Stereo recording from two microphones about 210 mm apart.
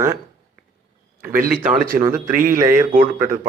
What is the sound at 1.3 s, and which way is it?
Speech, 45° right (ahead or behind).